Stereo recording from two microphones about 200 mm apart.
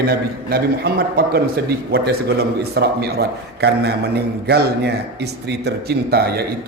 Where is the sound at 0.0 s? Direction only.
50° right (ahead or behind).